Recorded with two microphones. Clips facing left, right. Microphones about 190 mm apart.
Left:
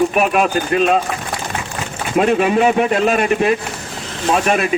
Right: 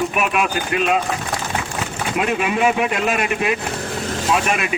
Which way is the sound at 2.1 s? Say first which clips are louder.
Left 7 dB; 35° left (ahead or behind).